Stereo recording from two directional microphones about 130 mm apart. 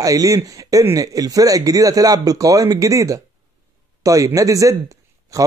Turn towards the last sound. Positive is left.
turn(degrees=-25)  # may be behind; listen again after turning